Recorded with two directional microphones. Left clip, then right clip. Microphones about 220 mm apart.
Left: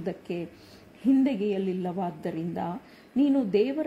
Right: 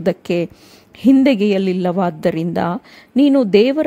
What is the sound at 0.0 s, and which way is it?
A woman's voice, 40° right (ahead or behind).